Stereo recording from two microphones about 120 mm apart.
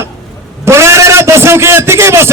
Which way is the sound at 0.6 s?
25° right (ahead or behind).